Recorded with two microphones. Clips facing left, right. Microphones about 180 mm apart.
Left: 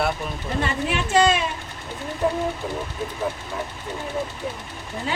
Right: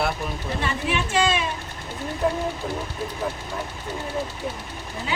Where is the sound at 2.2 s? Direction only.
Centre (ahead or behind).